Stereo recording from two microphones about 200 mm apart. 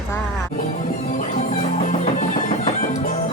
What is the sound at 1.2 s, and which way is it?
Music, 35° left (ahead or behind).